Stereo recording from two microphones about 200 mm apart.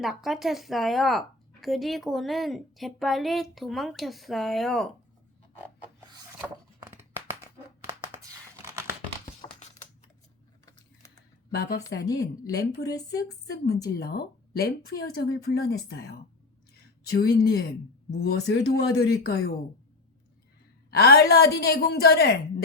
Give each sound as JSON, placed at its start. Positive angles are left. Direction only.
{"t": 0.0, "sound": "a woman's voice", "side_deg": 0}
{"t": 6.7, "sound": "a sound", "side_deg": -10}
{"t": 9.2, "sound": "a sound", "side_deg": 35}
{"t": 10.7, "sound": "a sound", "side_deg": 15}
{"t": 12.0, "sound": "a woman's voice", "side_deg": 15}
{"t": 12.5, "sound": "a woman's voice", "side_deg": 55}
{"t": 12.8, "sound": "a woman's voice", "side_deg": 20}
{"t": 13.1, "sound": "a woman's voice", "side_deg": 55}
{"t": 20.9, "sound": "a woman's voice", "side_deg": 50}